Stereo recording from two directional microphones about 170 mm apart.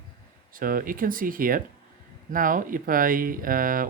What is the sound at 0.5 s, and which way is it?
Speech, 55° right (ahead or behind).